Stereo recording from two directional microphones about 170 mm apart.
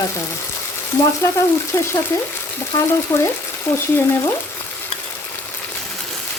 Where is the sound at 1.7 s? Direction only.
15° left (ahead or behind).